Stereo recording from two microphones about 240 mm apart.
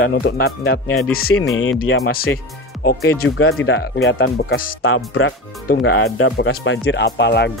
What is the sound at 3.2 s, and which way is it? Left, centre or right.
Speech, left.